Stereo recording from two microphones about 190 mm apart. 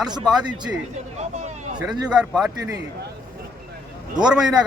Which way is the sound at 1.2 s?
35° right (ahead or behind).